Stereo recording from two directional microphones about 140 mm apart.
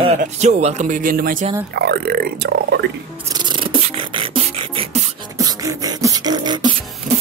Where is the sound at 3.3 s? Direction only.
30° right (ahead or behind).